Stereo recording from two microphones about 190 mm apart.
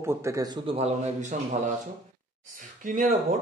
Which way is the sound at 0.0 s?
15° right (ahead or behind).